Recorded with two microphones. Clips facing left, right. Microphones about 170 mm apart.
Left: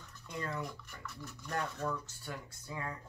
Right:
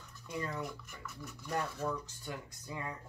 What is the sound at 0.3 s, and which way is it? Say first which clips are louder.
Speech: right 1 dB; 5° right (ahead or behind).